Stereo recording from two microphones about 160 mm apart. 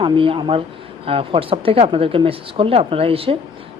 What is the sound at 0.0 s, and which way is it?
A man's voice, 35° right (ahead or behind).